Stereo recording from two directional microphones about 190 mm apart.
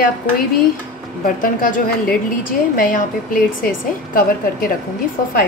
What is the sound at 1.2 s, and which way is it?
A woman's voice, 45° left (ahead or behind).